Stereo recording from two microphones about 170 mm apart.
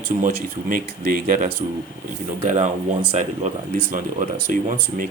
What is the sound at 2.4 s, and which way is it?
Speech, 40° right (ahead or behind).